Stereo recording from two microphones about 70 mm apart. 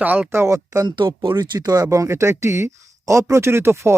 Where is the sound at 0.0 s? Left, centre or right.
Right.